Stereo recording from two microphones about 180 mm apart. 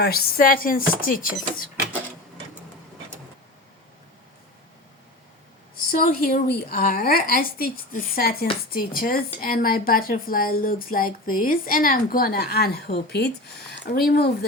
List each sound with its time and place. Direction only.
0.0 s a woman's voice: 60° left (ahead or behind)
5.9 s a woman's voice: 55° left (ahead or behind)